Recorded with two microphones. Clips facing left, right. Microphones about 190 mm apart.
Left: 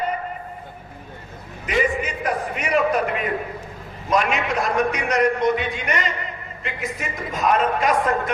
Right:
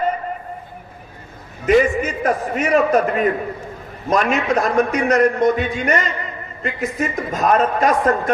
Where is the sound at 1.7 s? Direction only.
45° right (ahead or behind).